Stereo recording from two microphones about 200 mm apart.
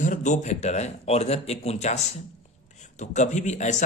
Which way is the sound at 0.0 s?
35° left (ahead or behind).